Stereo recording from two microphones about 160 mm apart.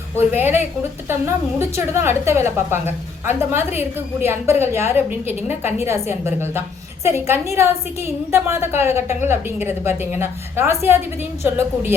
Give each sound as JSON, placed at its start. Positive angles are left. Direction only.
{"t": 0.2, "sound": "a woman's voice", "side_deg": -15}